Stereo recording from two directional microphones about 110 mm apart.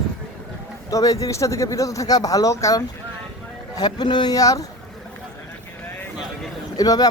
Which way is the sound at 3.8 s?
40° left (ahead or behind).